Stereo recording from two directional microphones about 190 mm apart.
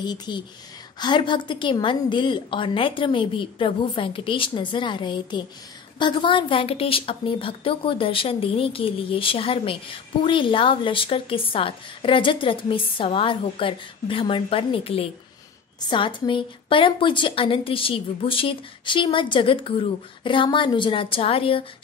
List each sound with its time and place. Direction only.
0.0 s a woman's voice: 20° left (ahead or behind)